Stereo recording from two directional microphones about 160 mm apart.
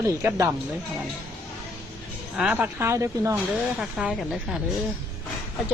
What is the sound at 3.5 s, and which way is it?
Speech, 5° right (ahead or behind).